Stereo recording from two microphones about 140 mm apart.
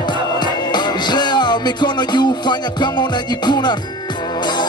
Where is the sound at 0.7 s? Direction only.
30° left (ahead or behind).